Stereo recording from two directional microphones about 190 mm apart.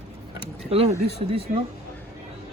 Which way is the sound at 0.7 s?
30° right (ahead or behind).